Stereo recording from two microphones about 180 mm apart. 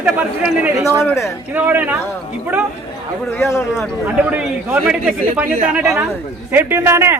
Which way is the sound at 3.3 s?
15° left (ahead or behind).